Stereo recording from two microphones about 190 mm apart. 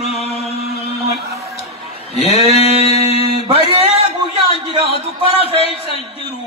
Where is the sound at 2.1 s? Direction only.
35° left (ahead or behind).